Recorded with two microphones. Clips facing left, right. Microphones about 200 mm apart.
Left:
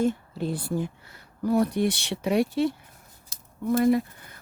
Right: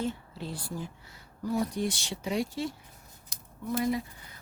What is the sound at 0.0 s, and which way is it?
Speech, 55° left (ahead or behind).